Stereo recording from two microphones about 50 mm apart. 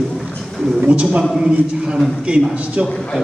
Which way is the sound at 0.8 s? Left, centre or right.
Right.